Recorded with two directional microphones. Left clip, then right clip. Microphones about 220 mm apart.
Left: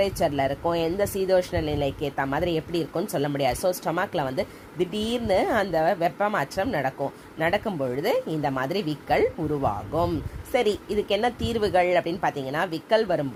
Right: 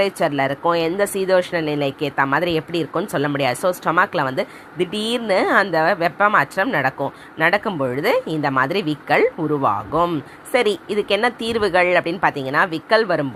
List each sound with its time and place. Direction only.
0.0 s speech: 15° right (ahead or behind)